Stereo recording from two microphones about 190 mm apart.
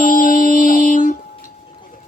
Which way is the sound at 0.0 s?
45° left (ahead or behind).